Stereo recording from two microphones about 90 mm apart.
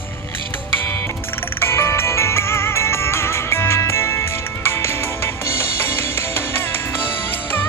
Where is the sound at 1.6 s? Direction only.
30° left (ahead or behind).